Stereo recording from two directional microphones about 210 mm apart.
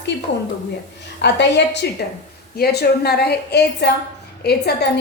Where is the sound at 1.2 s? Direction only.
55° left (ahead or behind).